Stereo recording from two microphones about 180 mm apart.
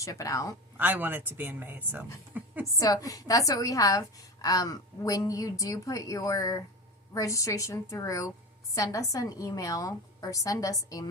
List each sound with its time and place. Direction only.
0.0 s a woman's voice: 20° left (ahead or behind)
0.8 s speech: 10° right (ahead or behind)
2.3 s a sound: 10° right (ahead or behind)
2.7 s a woman's voice: 20° left (ahead or behind)